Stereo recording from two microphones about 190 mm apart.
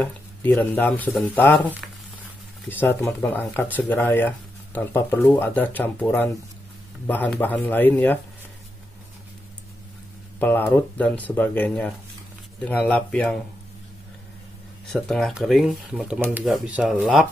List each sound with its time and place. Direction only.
0.0 s speech: 10° left (ahead or behind)
2.7 s speech: 10° left (ahead or behind)
10.4 s speech: 10° left (ahead or behind)
14.9 s speech: 5° left (ahead or behind)